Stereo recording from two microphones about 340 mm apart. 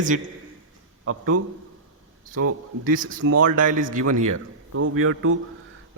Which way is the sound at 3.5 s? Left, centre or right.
Right.